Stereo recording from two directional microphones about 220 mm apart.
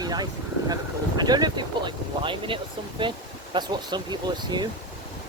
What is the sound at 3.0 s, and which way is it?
Speech, 20° right (ahead or behind).